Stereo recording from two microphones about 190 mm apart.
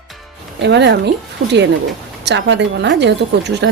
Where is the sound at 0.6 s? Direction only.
65° right (ahead or behind).